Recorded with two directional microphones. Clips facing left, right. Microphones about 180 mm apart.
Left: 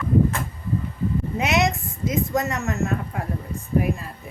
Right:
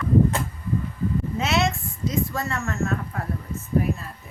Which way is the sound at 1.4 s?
15° left (ahead or behind).